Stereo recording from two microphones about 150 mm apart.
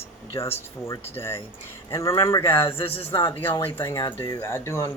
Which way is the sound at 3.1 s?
25° left (ahead or behind).